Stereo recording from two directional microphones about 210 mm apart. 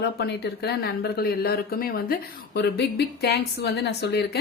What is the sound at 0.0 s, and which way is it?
A woman's voice, 50° left (ahead or behind).